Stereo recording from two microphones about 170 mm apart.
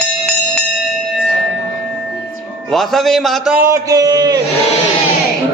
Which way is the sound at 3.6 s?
20° right (ahead or behind).